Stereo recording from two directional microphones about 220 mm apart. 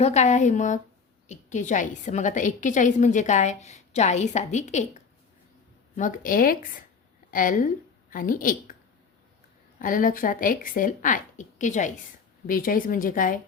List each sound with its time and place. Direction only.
0.0 s a woman's voice: 30° left (ahead or behind)
9.7 s a woman's voice: 40° left (ahead or behind)